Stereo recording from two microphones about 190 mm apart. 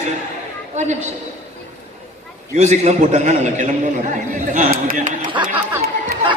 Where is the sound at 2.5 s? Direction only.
35° right (ahead or behind).